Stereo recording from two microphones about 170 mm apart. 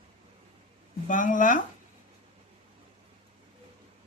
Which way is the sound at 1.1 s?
50° left (ahead or behind).